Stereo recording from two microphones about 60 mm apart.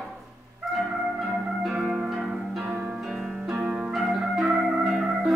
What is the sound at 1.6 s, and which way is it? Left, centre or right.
Organ, centre.